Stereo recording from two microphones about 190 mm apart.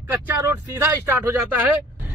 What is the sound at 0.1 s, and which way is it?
A man's voice, 15° right (ahead or behind).